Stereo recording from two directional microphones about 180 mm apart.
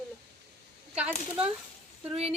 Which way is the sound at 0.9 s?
5° right (ahead or behind).